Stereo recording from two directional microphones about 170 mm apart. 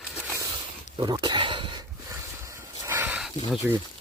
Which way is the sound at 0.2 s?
10° right (ahead or behind).